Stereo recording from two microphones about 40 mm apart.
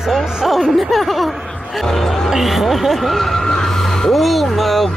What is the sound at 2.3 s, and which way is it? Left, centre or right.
Speech, centre.